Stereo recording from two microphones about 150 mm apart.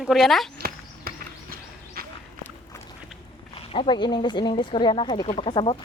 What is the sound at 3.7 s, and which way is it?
Speech, 35° left (ahead or behind).